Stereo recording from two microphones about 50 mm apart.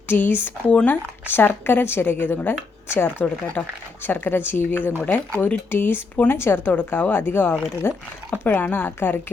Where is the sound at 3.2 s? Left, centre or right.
Left.